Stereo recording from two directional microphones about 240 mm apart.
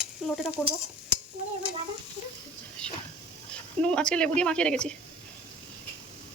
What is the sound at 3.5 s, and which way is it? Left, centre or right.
Speech, centre.